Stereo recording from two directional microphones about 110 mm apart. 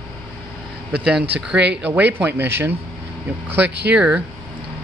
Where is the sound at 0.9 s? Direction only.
10° right (ahead or behind).